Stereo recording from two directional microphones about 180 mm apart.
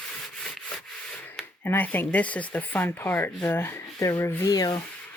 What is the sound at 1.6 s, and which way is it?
Speech, 10° left (ahead or behind).